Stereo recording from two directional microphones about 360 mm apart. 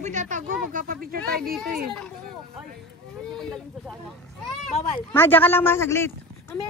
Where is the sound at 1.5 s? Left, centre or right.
Centre.